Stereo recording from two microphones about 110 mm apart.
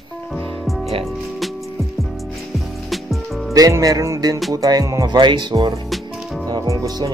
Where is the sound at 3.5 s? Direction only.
30° right (ahead or behind).